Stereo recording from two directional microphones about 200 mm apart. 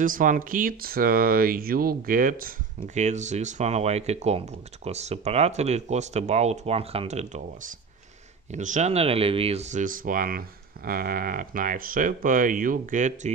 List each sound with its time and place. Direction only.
0.0 s speech: 40° right (ahead or behind)